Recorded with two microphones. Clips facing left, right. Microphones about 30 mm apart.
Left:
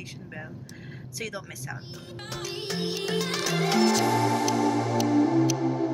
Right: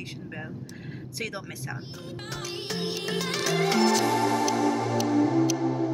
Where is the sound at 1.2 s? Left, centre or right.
Right.